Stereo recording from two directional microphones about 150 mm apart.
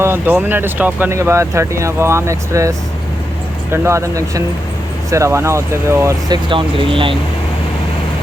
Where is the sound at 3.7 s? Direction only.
20° right (ahead or behind).